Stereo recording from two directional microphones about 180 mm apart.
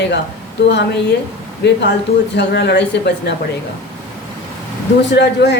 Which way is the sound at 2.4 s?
70° left (ahead or behind).